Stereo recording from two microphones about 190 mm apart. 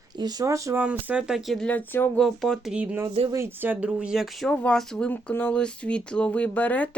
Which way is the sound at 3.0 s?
30° right (ahead or behind).